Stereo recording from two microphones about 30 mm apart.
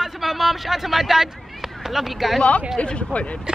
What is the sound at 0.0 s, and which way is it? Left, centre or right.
Speech, centre.